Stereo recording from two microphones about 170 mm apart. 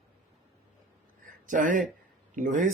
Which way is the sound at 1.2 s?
50° right (ahead or behind).